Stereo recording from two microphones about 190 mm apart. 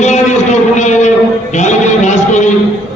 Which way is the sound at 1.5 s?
40° left (ahead or behind).